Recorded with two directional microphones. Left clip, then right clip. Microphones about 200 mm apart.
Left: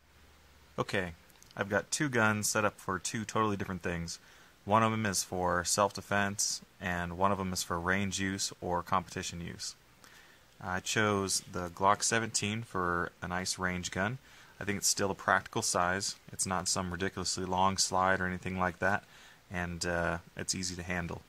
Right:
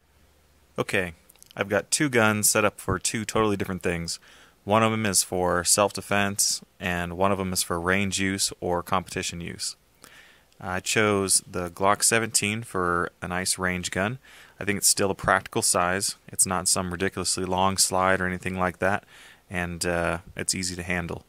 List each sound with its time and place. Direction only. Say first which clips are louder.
0.7 s speech: right 8 dB; 40° right (ahead or behind)